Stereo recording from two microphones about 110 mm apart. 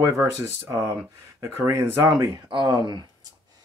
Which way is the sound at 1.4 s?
25° right (ahead or behind).